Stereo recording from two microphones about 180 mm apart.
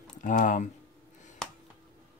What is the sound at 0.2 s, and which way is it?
Speech, 45° left (ahead or behind).